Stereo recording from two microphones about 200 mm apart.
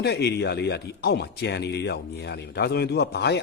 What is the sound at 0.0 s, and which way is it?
Speech, 55° left (ahead or behind).